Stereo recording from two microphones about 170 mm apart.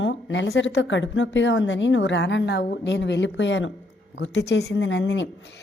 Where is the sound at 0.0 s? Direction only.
90° left.